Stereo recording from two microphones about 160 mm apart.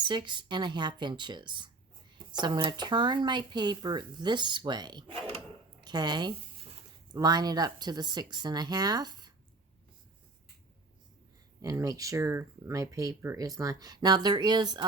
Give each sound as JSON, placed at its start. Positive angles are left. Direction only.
{"t": 0.0, "sound": "speech", "side_deg": -30}
{"t": 11.6, "sound": "speech", "side_deg": -20}